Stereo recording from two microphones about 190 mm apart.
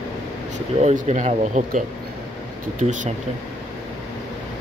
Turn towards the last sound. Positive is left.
turn(degrees=-40)  # may be behind; listen again after turning